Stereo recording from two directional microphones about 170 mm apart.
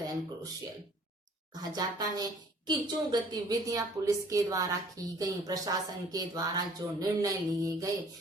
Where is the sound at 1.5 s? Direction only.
25° right (ahead or behind).